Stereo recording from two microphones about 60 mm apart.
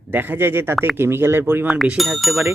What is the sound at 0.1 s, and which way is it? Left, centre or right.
Speech, right.